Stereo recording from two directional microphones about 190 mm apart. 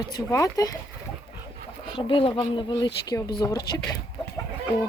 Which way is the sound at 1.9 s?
25° left (ahead or behind).